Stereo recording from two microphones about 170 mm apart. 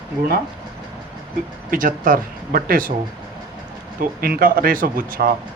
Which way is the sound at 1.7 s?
55° right (ahead or behind).